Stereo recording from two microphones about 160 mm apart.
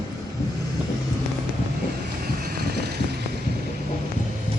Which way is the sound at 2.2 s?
75° right (ahead or behind).